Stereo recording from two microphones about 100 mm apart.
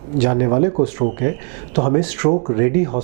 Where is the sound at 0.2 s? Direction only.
15° right (ahead or behind).